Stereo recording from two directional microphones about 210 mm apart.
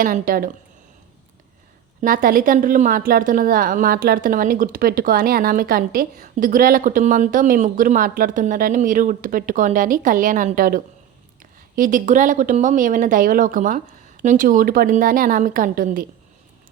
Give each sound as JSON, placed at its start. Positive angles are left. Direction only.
{"t": 0.0, "sound": "a woman's voice", "side_deg": -40}
{"t": 2.0, "sound": "a woman's voice", "side_deg": -40}